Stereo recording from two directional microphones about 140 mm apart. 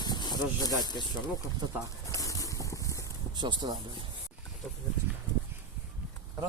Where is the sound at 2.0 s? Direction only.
25° left (ahead or behind).